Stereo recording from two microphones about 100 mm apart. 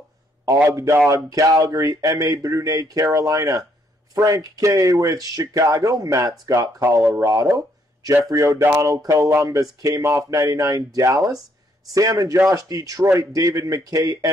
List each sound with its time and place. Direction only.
0.7 s speech: 35° right (ahead or behind)